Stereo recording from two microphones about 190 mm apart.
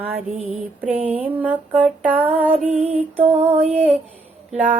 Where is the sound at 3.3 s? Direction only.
35° right (ahead or behind).